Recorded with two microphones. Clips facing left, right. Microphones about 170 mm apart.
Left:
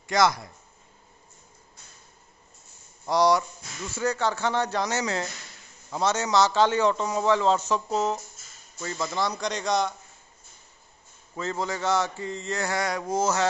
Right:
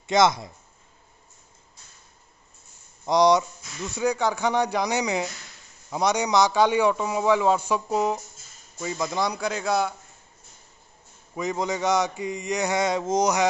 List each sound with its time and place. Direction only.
0.0 s speech: 20° right (ahead or behind)
3.1 s a man's voice: 20° right (ahead or behind)
11.3 s a man's voice: 15° right (ahead or behind)